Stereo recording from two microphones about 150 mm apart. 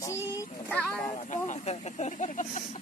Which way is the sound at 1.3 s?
50° left (ahead or behind).